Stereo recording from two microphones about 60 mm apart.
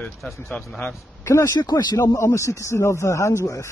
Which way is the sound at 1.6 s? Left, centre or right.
Left.